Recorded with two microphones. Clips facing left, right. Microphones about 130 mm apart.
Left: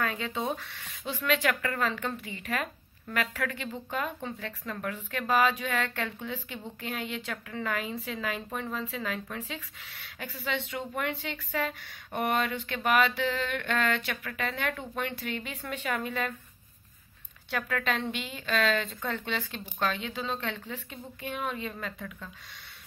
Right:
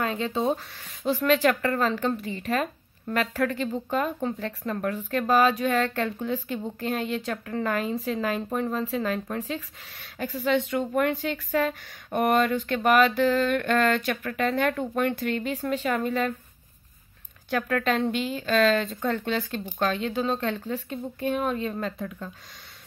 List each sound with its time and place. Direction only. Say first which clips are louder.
0.0 s speech: right 6 dB; 30° right (ahead or behind)
17.5 s speech: right 6 dB; 40° right (ahead or behind)